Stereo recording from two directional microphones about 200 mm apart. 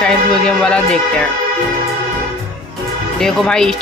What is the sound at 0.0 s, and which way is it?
Speech, 5° left (ahead or behind).